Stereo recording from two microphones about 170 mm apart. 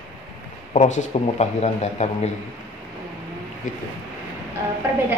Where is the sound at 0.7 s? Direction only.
45° left (ahead or behind).